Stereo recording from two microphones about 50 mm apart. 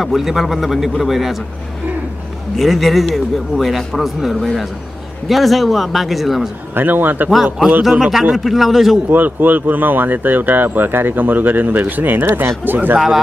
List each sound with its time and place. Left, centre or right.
0.0 s a man's voice: centre
2.5 s a man's voice: centre
6.7 s speech: right
8.0 s a man's voice: centre
9.1 s speech: right